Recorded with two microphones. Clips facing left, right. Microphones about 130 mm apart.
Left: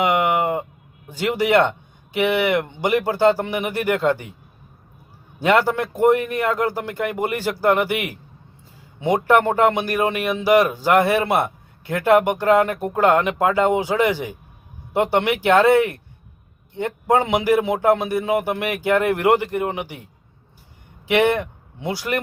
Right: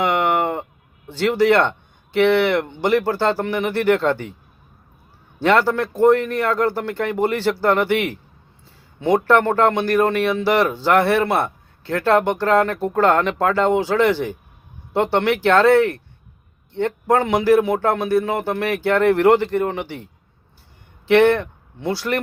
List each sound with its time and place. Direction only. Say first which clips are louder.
0.0 s a sound: even; 10° left (ahead or behind)
1.1 s speech: right 2 dB; 15° left (ahead or behind)
5.4 s speech: right 1 dB; 10° left (ahead or behind)
21.1 s speech: right 4 dB; 15° left (ahead or behind)